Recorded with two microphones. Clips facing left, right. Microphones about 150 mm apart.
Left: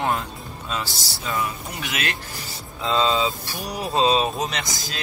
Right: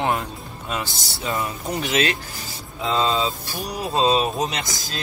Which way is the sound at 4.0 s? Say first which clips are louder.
Even; 20° left (ahead or behind).